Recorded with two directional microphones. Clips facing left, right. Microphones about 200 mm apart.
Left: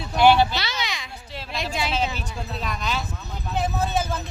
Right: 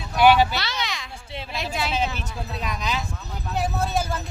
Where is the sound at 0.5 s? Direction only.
Centre (ahead or behind).